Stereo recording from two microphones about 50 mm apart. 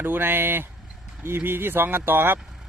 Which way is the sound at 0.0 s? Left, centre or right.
Right.